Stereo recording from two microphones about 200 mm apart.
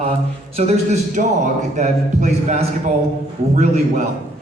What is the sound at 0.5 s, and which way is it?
A man's voice, 30° right (ahead or behind).